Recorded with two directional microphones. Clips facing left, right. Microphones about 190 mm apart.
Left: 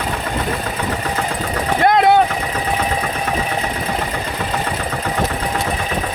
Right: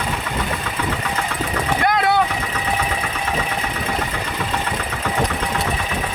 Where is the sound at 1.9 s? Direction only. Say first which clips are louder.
Left 7 dB; 20° left (ahead or behind).